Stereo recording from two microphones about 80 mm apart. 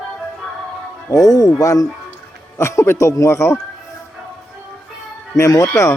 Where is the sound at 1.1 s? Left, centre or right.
Left.